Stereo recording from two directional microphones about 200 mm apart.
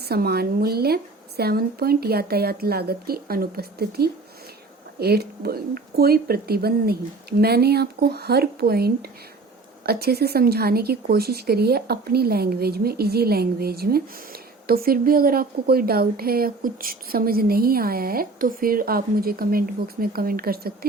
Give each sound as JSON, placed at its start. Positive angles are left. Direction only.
{"t": 0.0, "sound": "a woman's voice", "side_deg": -50}